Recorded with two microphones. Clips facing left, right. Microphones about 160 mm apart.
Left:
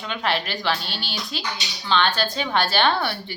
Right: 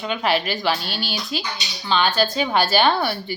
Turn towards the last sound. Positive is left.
turn(degrees=-5)  # may be behind; listen again after turning